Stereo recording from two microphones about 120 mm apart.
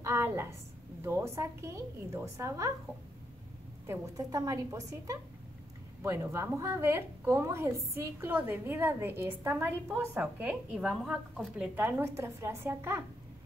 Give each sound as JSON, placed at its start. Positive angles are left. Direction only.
{"t": 0.0, "sound": "a sound", "side_deg": -20}
{"t": 1.0, "sound": "a woman's voice", "side_deg": -20}
{"t": 3.8, "sound": "a woman's voice", "side_deg": -25}
{"t": 11.7, "sound": "a woman's voice", "side_deg": -15}